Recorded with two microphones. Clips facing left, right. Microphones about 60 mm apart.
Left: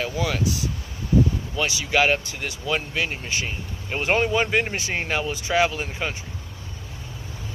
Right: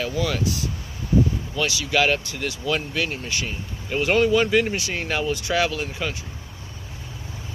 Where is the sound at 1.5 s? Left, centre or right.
Centre.